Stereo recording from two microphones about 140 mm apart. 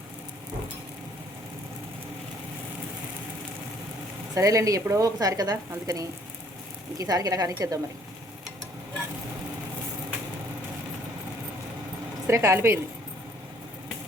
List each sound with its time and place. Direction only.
4.4 s speech: 25° right (ahead or behind)
12.3 s speech: 20° right (ahead or behind)